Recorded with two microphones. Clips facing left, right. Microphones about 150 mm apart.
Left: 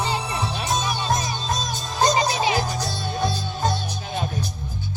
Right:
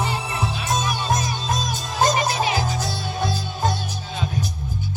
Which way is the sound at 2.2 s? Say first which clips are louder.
Left 1 dB; 20° left (ahead or behind).